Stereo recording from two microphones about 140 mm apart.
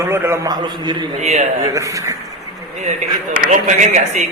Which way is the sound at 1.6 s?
25° right (ahead or behind).